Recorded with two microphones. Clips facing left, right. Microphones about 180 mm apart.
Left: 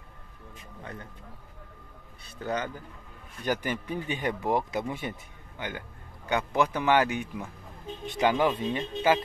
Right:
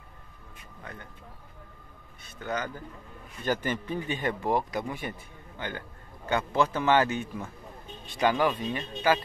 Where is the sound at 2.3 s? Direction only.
30° left (ahead or behind).